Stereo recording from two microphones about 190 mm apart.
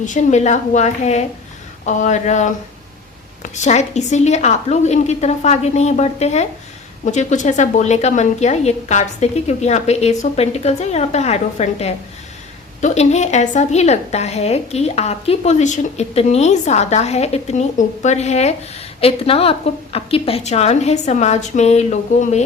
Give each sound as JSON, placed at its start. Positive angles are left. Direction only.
{"t": 0.0, "sound": "a woman's voice", "side_deg": 40}